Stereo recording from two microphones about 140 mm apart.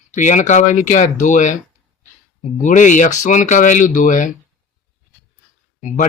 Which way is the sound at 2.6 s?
65° left (ahead or behind).